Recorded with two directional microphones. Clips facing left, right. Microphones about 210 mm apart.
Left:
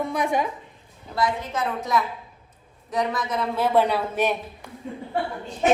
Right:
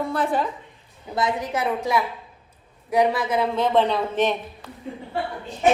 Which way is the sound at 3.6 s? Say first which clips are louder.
Left 1 dB; 10° left (ahead or behind).